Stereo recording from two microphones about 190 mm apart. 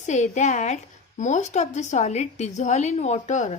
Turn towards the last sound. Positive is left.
turn(degrees=40)  # may be behind; listen again after turning